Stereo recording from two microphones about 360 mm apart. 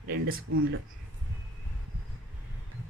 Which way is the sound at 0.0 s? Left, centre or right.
Right.